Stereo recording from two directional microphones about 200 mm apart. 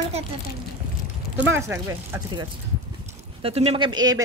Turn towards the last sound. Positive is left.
turn(degrees=-20)  # may be behind; listen again after turning